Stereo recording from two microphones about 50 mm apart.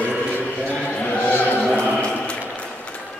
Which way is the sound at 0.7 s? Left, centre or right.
Left.